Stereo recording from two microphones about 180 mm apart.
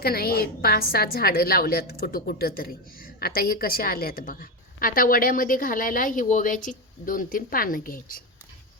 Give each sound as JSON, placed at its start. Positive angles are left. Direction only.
{"t": 0.0, "sound": "a woman's voice", "side_deg": 60}